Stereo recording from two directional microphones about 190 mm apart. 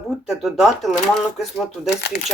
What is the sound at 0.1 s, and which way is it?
Speech, centre (ahead or behind).